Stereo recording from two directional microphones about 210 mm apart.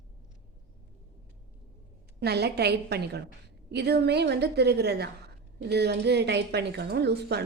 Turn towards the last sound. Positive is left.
turn(degrees=-50)  # may be behind; listen again after turning